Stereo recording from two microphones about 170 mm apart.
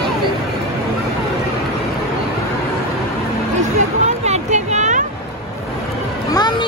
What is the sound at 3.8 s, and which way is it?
Music, 45° right (ahead or behind).